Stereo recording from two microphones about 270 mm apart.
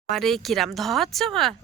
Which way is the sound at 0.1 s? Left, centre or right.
Centre.